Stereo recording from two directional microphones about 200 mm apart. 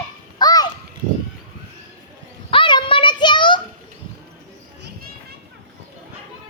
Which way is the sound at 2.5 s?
25° left (ahead or behind).